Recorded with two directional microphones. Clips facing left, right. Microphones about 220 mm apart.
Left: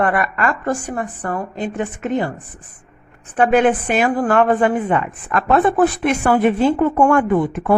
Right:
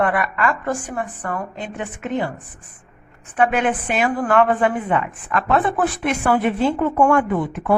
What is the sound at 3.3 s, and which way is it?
A woman's voice, 35° left (ahead or behind).